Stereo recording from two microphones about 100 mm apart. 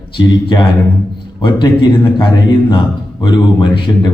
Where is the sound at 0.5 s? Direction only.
50° left (ahead or behind).